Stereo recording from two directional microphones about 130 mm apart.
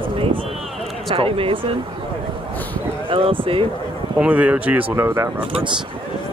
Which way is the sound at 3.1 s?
40° right (ahead or behind).